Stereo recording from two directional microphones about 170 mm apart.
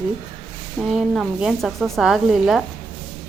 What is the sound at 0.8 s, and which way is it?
Speech, centre (ahead or behind).